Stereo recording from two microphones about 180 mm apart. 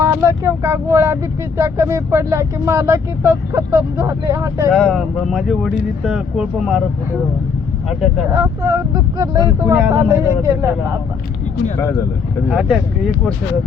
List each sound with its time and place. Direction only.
0.0 s speech: 15° right (ahead or behind)
4.7 s speech: centre (ahead or behind)
8.3 s speech: 20° right (ahead or behind)
12.5 s speech: 5° right (ahead or behind)